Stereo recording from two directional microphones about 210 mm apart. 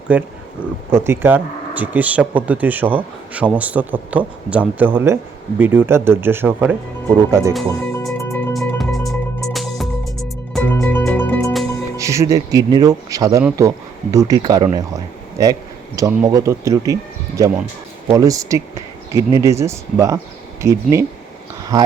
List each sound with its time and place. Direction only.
0.1 s speech: 5° right (ahead or behind)
8.2 s music: 15° left (ahead or behind)
8.5 s music: centre (ahead or behind)
11.9 s speech: 15° right (ahead or behind)